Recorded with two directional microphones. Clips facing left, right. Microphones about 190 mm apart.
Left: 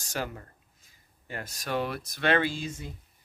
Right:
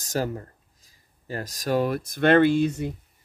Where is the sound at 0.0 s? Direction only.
40° right (ahead or behind); by 2.9 s 65° right (ahead or behind).